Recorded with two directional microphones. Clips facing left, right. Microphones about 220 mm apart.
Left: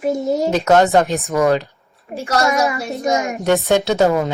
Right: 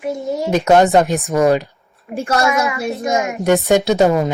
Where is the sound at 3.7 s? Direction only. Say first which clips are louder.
Right 2 dB; 15° right (ahead or behind).